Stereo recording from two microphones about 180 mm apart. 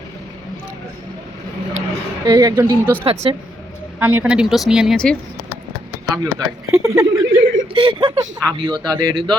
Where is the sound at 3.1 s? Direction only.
35° right (ahead or behind).